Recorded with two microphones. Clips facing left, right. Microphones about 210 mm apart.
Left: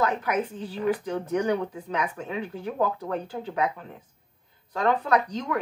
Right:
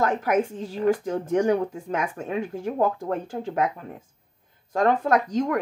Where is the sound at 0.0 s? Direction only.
45° right (ahead or behind).